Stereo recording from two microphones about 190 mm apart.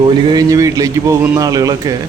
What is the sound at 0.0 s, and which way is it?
Speech, 20° right (ahead or behind).